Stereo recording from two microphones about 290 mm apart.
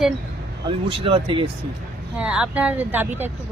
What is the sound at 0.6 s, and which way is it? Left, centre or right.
Speech, centre.